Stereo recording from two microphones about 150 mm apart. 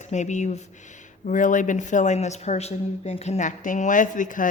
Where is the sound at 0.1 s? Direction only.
50° left (ahead or behind).